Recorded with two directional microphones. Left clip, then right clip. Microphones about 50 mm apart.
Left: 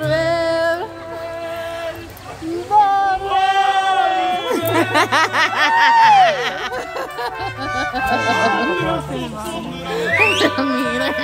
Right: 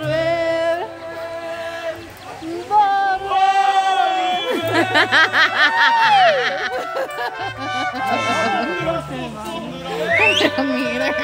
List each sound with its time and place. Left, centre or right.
0.2 s music: centre
2.7 s a sound: centre
3.3 s female singing: centre
4.0 s a sound: centre
7.7 s music: right
9.8 s music: right
10.1 s music: centre
10.8 s music: right